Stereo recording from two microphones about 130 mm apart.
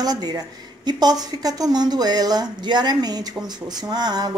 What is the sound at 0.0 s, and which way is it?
A woman's voice, 30° right (ahead or behind).